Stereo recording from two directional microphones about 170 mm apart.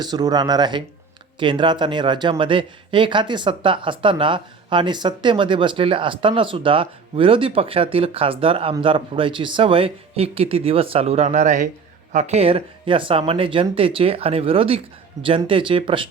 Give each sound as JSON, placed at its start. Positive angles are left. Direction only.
{"t": 0.0, "sound": "speech", "side_deg": -25}